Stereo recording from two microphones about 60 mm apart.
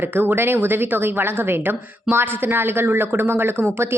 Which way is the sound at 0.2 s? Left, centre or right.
Right.